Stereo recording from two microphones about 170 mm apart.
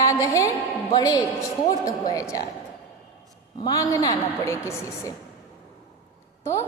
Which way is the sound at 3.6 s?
20° left (ahead or behind).